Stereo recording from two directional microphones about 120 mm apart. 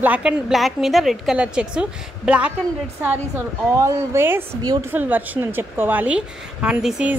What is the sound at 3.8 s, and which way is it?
A woman's voice, 20° right (ahead or behind).